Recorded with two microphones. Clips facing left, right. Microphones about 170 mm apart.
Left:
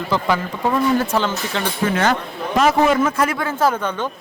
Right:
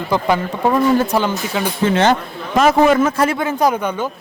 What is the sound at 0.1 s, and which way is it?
Speech, 15° right (ahead or behind).